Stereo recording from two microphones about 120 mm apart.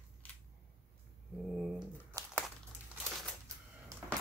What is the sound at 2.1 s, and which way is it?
Crumpling, 30° right (ahead or behind).